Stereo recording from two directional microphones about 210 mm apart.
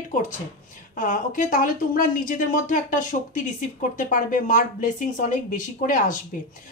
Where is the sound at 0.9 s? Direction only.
40° left (ahead or behind).